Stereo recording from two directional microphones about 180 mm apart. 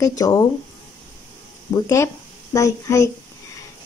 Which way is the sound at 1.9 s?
15° left (ahead or behind).